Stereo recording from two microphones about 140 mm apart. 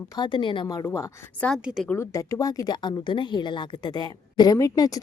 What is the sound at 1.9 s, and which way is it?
A woman's voice, 20° left (ahead or behind).